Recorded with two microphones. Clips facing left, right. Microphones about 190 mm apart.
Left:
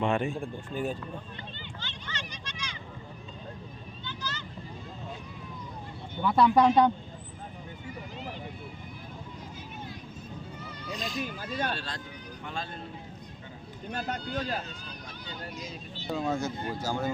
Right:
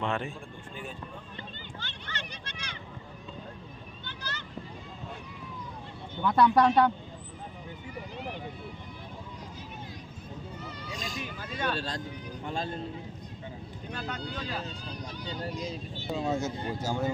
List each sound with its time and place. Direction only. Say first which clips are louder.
0.0 s speech: left 4 dB; 15° left (ahead or behind)
1.8 s a sound: left 1 dB; 55° right (ahead or behind)
4.0 s vehicle: left 3 dB; 60° right (ahead or behind)
6.1 s speech: left 1 dB; 10° left (ahead or behind)
10.9 s speech: left 5 dB; 45° right (ahead or behind)
11.3 s speech: even; 40° left (ahead or behind)
11.8 s speech: right 4 dB; 40° right (ahead or behind)
13.9 s speech: left 4 dB; 45° left (ahead or behind)
16.1 s speech: even; 25° right (ahead or behind)